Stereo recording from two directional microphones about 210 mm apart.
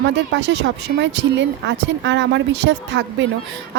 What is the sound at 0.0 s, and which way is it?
A woman's voice, 60° right (ahead or behind).